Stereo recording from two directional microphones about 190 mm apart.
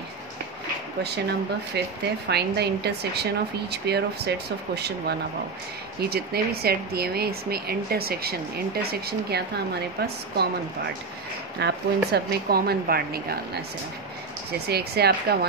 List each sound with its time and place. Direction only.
1.8 s speech: 60° right (ahead or behind)
11.6 s speech: 60° right (ahead or behind)
14.7 s speech: 55° right (ahead or behind)